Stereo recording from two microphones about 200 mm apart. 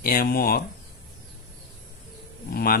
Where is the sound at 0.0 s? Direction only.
45° left (ahead or behind).